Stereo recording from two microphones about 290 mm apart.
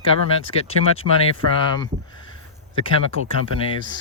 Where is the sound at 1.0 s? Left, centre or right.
Right.